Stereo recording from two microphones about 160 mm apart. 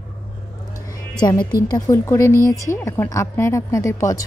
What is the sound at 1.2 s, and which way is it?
A woman's voice, 25° left (ahead or behind).